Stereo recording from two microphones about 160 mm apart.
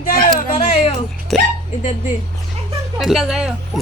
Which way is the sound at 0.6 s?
40° left (ahead or behind).